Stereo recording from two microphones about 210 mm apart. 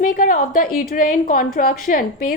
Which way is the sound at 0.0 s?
40° left (ahead or behind).